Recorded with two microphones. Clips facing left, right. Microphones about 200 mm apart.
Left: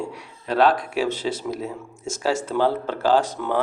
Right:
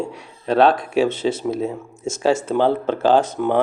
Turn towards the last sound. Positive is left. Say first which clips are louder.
# right 4 dB
turn(degrees=-20)  # may be behind; listen again after turning